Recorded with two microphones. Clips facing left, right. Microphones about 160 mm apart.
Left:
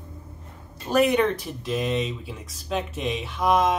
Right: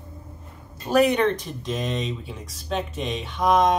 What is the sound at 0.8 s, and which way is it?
Speech, centre (ahead or behind).